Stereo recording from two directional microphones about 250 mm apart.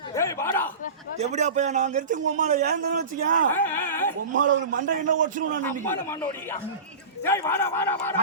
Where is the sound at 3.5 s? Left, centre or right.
Centre.